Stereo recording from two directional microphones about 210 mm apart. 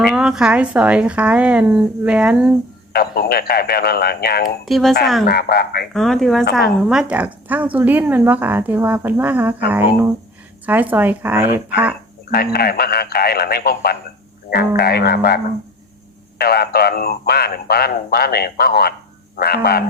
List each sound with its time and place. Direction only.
0.1 s speech: 5° right (ahead or behind)
2.9 s speech: 45° left (ahead or behind)
4.6 s speech: centre (ahead or behind)
5.2 s speech: 50° left (ahead or behind)
5.9 s speech: centre (ahead or behind)
12.5 s speech: 45° left (ahead or behind)
16.4 s speech: 50° left (ahead or behind)